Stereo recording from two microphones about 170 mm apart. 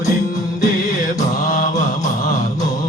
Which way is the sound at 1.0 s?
50° left (ahead or behind).